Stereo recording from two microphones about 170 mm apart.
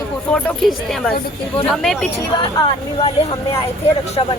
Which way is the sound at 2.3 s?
30° left (ahead or behind).